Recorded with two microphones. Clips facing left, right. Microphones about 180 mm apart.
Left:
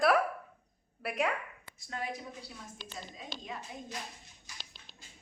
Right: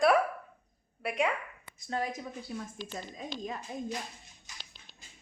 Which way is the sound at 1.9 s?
40° right (ahead or behind).